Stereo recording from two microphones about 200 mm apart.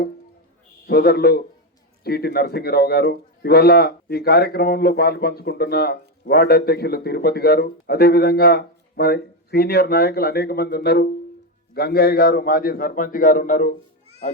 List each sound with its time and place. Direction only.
0.9 s a man's voice: 55° left (ahead or behind)